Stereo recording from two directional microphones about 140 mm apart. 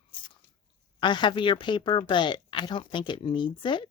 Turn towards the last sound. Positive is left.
turn(degrees=35)  # may be behind; listen again after turning